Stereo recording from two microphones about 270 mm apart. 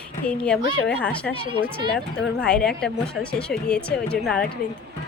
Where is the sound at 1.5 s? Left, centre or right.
Centre.